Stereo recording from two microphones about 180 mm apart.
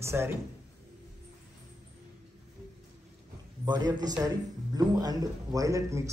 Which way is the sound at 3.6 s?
20° right (ahead or behind).